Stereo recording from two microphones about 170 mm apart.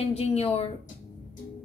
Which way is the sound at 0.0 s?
40° left (ahead or behind).